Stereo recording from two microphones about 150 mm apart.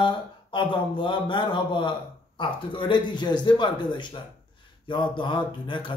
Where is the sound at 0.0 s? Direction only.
35° left (ahead or behind).